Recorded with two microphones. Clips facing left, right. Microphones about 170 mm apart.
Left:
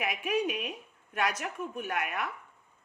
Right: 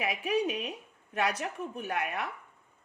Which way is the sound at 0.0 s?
30° right (ahead or behind).